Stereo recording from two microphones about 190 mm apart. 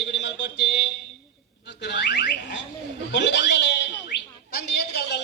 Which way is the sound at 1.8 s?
65° left (ahead or behind).